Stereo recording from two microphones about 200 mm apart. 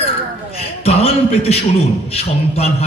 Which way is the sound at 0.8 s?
30° left (ahead or behind).